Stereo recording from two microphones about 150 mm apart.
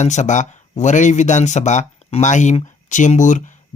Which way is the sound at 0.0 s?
50° left (ahead or behind).